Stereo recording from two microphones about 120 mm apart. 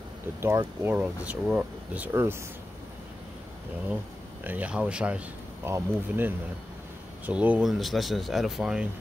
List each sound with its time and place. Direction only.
0.4 s speech: 20° right (ahead or behind)
4.5 s speech: 10° right (ahead or behind)